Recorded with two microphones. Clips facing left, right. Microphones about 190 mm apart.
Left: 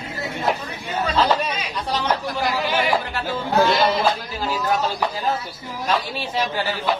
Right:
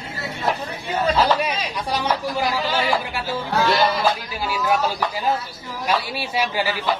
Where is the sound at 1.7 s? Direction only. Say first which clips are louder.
Even; 10° right (ahead or behind).